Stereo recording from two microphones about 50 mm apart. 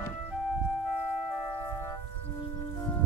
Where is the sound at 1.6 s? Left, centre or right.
Left.